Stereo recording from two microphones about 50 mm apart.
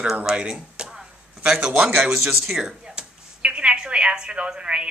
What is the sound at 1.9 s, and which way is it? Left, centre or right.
A woman's voice, centre.